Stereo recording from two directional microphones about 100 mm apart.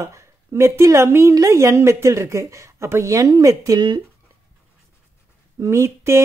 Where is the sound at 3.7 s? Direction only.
50° right (ahead or behind).